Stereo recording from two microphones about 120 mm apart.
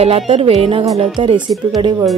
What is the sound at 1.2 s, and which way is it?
Speech, 40° right (ahead or behind).